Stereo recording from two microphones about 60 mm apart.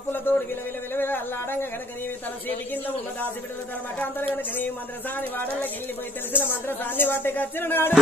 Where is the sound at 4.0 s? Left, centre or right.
Left.